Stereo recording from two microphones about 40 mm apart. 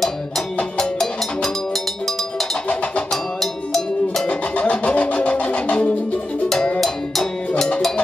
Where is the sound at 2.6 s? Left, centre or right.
Left.